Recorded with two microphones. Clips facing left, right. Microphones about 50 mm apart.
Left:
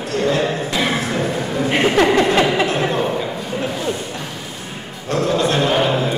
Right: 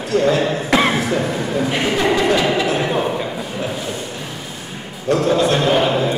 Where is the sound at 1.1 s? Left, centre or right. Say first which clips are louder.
Right 1 dB; centre.